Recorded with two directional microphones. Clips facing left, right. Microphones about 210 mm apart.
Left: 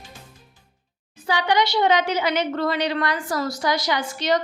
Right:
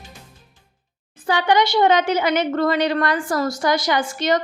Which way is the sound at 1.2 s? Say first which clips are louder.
Right 3 dB; 50° right (ahead or behind).